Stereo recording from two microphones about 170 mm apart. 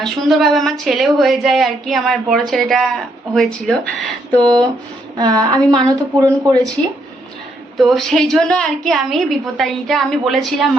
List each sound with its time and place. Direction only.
0.0 s a woman's voice: centre (ahead or behind)
5.1 s speech: 25° right (ahead or behind)
7.8 s a woman's voice: centre (ahead or behind)